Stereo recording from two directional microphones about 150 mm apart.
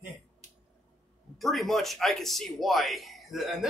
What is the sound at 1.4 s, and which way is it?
Speech, centre (ahead or behind).